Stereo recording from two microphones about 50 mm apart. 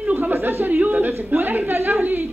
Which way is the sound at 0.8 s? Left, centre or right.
Right.